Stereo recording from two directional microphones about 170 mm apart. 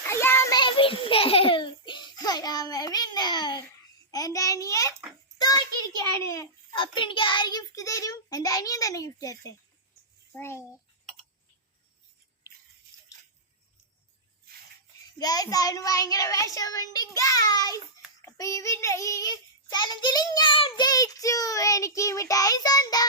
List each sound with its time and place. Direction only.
0.0 s child singing: 15° left (ahead or behind)
0.5 s a sound: 30° left (ahead or behind)
4.1 s child singing: 20° left (ahead or behind)
5.4 s a sound: 25° left (ahead or behind)
6.0 s child singing: 20° left (ahead or behind)
10.3 s a child's voice: 15° left (ahead or behind)
15.2 s child singing: 20° left (ahead or behind)